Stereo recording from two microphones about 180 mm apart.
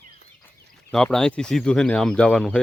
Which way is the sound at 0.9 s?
5° left (ahead or behind).